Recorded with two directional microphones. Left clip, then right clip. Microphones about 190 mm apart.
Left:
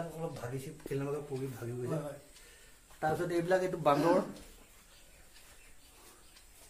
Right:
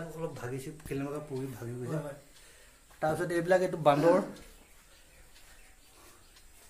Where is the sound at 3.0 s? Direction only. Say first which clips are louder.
Right 2 dB; 45° right (ahead or behind).